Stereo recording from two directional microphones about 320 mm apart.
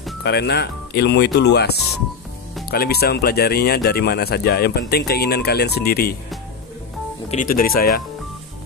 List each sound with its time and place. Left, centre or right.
0.2 s speech: left
7.2 s speech: left